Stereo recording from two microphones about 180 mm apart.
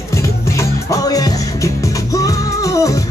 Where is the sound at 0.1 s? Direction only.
15° left (ahead or behind).